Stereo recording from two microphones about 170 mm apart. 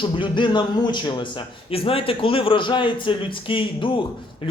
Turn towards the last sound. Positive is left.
turn(degrees=30)  # may be behind; listen again after turning